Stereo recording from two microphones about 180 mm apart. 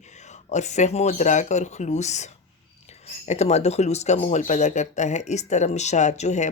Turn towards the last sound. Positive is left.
turn(degrees=40)  # may be behind; listen again after turning